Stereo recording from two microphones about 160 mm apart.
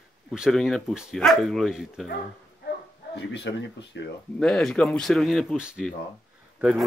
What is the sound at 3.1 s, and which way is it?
Speech, 90° left.